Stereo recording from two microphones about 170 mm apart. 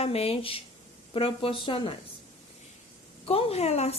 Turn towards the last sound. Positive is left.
turn(degrees=40)  # may be behind; listen again after turning